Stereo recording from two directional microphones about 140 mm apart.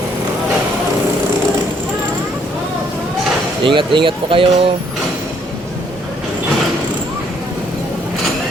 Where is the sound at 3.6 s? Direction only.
35° right (ahead or behind).